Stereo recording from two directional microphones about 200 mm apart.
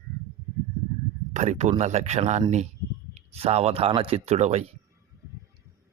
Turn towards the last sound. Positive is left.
turn(degrees=-35)  # may be behind; listen again after turning